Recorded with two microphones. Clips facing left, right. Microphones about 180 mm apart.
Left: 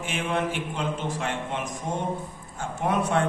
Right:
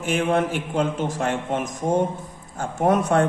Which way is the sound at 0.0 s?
45° right (ahead or behind).